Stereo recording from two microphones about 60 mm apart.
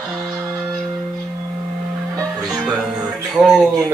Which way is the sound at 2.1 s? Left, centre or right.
Right.